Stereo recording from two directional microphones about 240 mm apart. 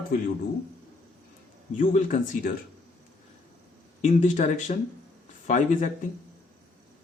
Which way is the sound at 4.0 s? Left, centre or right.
Left.